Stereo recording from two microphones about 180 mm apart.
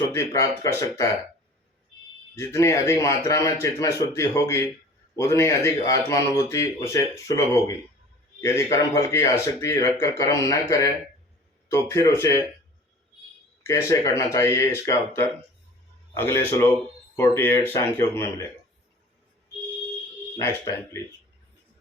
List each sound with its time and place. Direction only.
0.1 s speech: 15° left (ahead or behind)
2.3 s speech: 15° left (ahead or behind)
13.7 s speech: 20° left (ahead or behind)
20.4 s speech: 15° left (ahead or behind)